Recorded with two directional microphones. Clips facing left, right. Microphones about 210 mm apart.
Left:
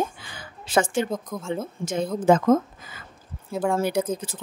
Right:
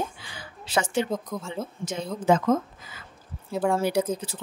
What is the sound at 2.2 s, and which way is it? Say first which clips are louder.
Speech: left 3 dB; 50° left (ahead or behind).